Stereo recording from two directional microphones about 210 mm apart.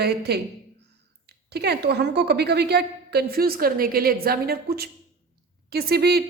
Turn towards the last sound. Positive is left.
turn(degrees=-50)  # may be behind; listen again after turning